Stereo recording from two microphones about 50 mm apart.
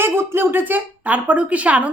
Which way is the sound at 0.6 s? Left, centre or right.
Right.